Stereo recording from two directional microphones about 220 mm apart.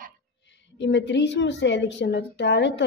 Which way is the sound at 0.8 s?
55° left (ahead or behind).